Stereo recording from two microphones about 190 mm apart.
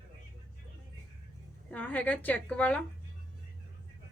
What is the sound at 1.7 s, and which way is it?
A woman's voice, 10° left (ahead or behind).